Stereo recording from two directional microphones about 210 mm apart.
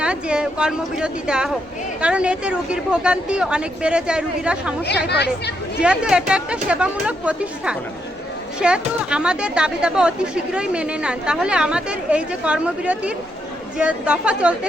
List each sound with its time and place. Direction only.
0.0 s speech: 5° right (ahead or behind)
5.0 s speech: 50° left (ahead or behind)
5.8 s speech: 5° right (ahead or behind)